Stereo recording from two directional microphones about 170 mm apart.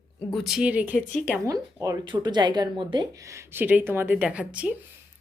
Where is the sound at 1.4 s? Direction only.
20° right (ahead or behind).